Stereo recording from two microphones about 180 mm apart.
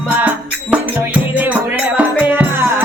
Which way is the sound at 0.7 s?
10° right (ahead or behind).